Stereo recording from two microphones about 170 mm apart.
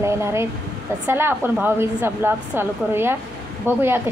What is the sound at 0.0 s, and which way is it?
A woman's voice, 15° right (ahead or behind).